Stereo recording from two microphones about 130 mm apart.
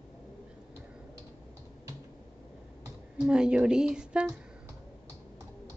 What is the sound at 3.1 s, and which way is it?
Speech, 5° right (ahead or behind).